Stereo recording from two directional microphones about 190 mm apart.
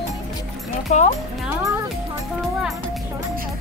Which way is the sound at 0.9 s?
40° left (ahead or behind).